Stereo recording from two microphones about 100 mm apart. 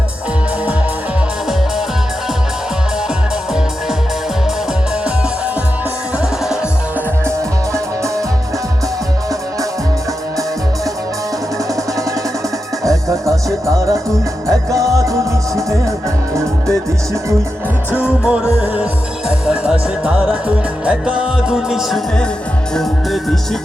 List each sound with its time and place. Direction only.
7.3 s music: 30° right (ahead or behind)
12.8 s music: 35° right (ahead or behind)
17.9 s music: 10° right (ahead or behind)